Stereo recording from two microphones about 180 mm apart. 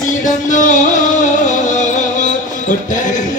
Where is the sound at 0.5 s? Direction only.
45° left (ahead or behind).